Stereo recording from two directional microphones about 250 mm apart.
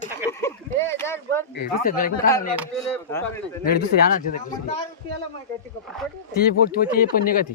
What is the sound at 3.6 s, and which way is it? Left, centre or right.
Speech, left.